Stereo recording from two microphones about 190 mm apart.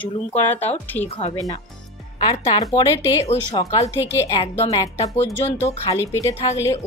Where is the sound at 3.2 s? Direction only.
35° left (ahead or behind).